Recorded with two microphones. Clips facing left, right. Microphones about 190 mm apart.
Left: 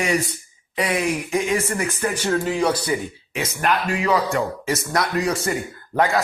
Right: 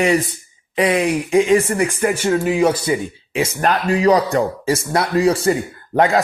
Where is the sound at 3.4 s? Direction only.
35° right (ahead or behind).